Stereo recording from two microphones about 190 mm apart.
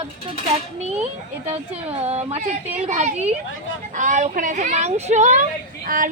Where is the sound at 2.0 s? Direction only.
35° right (ahead or behind).